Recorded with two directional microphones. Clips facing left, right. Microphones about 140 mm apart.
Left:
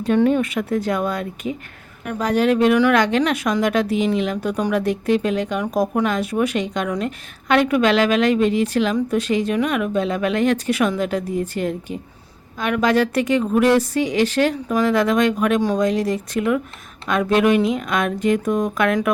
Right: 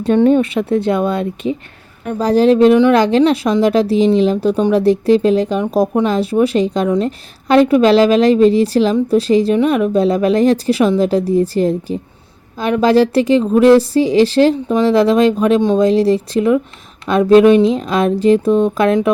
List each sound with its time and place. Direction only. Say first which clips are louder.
0.0 s a woman's voice: right 6 dB; 30° right (ahead or behind)